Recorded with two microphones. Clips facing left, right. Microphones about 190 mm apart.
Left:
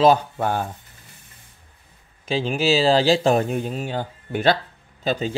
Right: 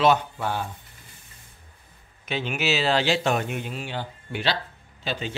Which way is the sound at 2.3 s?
30° left (ahead or behind).